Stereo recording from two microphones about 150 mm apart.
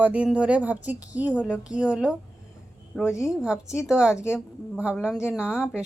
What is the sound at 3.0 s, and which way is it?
Speech, 20° left (ahead or behind).